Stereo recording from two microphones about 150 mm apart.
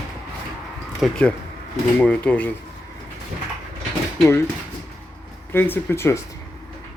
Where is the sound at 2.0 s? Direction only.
10° left (ahead or behind).